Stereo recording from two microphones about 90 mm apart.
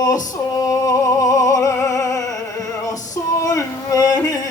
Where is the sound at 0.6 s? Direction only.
40° left (ahead or behind).